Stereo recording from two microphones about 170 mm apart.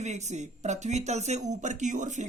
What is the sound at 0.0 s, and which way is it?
Speech, 40° right (ahead or behind).